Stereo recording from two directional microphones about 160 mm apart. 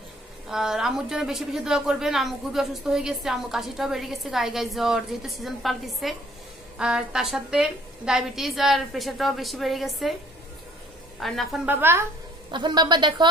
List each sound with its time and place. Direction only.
0.5 s speech: 5° right (ahead or behind)
11.1 s speech: centre (ahead or behind)
11.6 s speech: 15° right (ahead or behind)
12.4 s a woman's voice: 30° right (ahead or behind)